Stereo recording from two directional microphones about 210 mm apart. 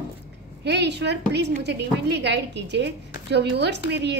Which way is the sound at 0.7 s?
55° right (ahead or behind).